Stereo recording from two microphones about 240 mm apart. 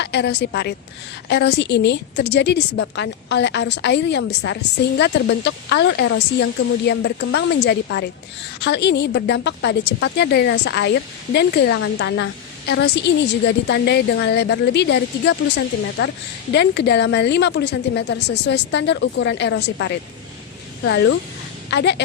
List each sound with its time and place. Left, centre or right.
0.0 s a woman's voice: left